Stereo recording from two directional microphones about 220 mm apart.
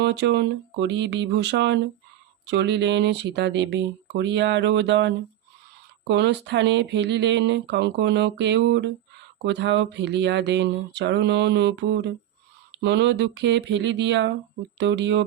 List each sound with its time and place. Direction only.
0.0 s speech: 50° right (ahead or behind)